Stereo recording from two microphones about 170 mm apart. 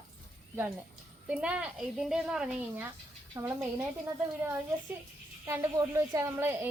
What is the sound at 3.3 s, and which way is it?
Speech, 20° right (ahead or behind).